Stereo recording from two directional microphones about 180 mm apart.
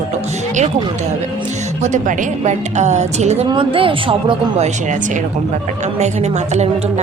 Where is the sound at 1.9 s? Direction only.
40° right (ahead or behind).